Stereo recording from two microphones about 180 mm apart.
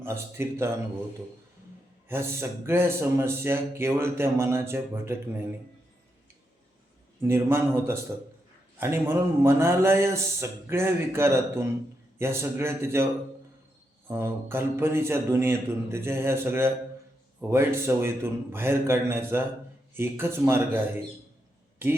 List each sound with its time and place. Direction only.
0.0 s speech: 15° right (ahead or behind)
2.0 s speech: 15° right (ahead or behind)
7.2 s speech: 15° right (ahead or behind)
14.1 s speech: 10° right (ahead or behind)